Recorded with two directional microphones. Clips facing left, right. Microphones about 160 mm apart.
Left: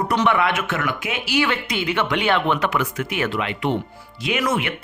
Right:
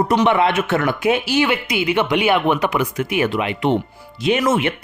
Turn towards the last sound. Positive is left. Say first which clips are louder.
# right 5 dB
turn(degrees=-25)  # may be behind; listen again after turning